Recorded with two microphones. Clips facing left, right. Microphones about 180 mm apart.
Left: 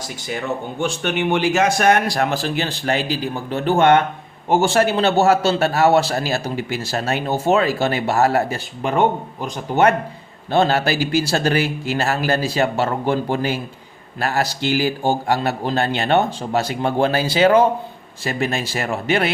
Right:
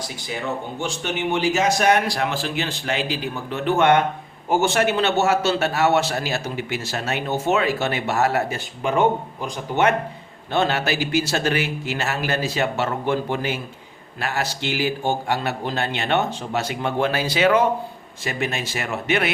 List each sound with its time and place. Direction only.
0.8 s a man's voice: 60° left (ahead or behind); by 19.3 s 35° left (ahead or behind)